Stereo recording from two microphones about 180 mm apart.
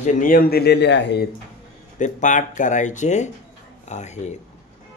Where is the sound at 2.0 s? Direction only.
45° left (ahead or behind).